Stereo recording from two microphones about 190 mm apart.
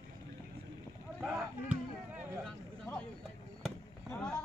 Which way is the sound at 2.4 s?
5° left (ahead or behind).